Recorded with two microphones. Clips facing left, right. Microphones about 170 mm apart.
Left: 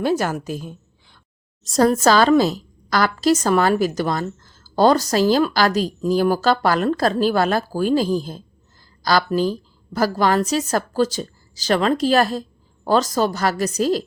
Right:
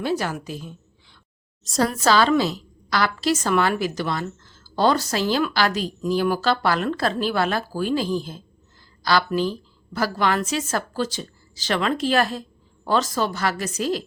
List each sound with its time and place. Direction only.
0.0 s a woman's voice: 45° left (ahead or behind)